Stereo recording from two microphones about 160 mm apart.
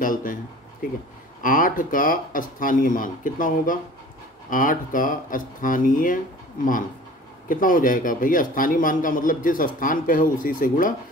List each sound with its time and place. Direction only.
0.0 s a sound: 60° left (ahead or behind)
1.4 s speech: 60° left (ahead or behind)
7.4 s speech: 60° left (ahead or behind)